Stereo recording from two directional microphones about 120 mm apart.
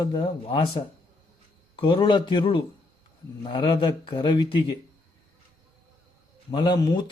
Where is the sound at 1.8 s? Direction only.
45° left (ahead or behind).